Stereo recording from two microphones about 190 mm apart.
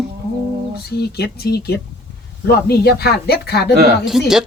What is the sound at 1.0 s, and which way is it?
Speech, 55° left (ahead or behind).